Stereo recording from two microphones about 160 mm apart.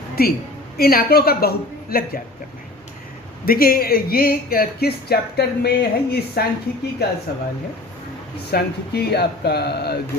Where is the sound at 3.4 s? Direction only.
65° left (ahead or behind); by 6.4 s 90° left.